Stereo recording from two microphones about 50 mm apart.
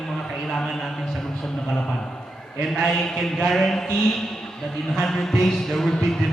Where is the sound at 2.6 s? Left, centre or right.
Centre.